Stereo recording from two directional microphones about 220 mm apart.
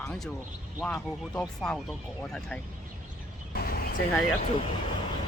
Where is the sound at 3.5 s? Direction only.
45° left (ahead or behind).